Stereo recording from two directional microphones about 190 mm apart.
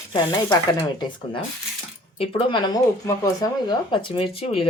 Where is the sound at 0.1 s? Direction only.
20° left (ahead or behind).